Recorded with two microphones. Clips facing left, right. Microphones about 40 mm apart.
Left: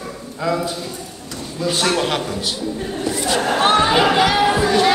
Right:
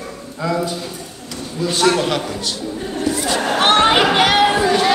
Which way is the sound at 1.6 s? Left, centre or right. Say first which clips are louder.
Right 3 dB; centre.